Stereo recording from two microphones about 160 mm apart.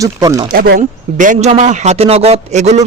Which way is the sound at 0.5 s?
75° right (ahead or behind).